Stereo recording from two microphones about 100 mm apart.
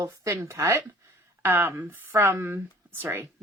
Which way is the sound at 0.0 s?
30° right (ahead or behind).